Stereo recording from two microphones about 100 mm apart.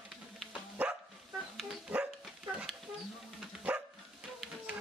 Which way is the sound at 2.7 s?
5° left (ahead or behind).